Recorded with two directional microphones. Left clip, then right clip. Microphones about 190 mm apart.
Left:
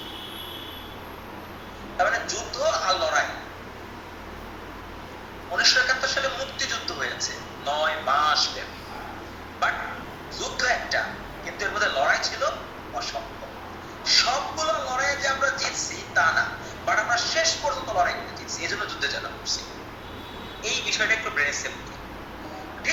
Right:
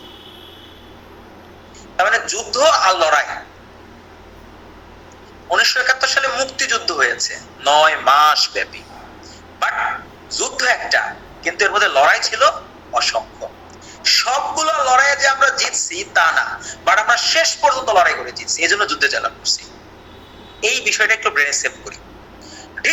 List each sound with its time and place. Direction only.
2.0 s a man's voice: 50° right (ahead or behind)
5.5 s a man's voice: 55° right (ahead or behind)
10.3 s a man's voice: 50° right (ahead or behind)